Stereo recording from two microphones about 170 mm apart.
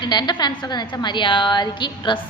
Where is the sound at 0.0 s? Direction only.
25° left (ahead or behind).